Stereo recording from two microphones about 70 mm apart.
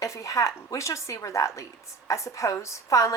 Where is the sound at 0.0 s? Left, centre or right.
Left.